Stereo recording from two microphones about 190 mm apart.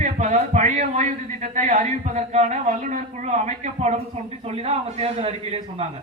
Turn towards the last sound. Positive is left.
turn(degrees=-30)  # may be behind; listen again after turning